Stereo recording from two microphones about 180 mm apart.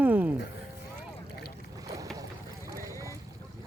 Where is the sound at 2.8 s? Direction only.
15° right (ahead or behind).